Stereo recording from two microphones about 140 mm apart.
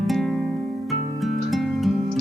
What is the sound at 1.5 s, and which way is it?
Music, centre (ahead or behind).